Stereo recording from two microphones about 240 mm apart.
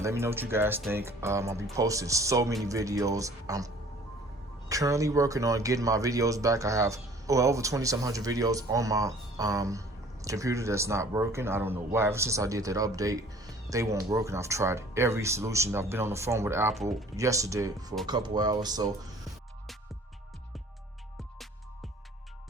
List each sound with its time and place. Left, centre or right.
0.0 s speech: centre
4.7 s speech: centre